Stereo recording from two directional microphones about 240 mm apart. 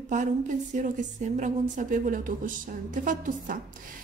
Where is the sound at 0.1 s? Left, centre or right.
Right.